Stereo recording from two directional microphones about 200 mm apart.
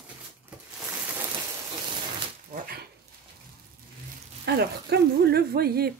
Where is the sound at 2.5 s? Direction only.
50° right (ahead or behind).